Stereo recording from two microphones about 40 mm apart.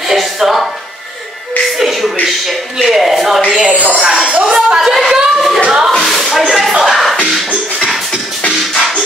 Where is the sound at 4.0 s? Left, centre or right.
Centre.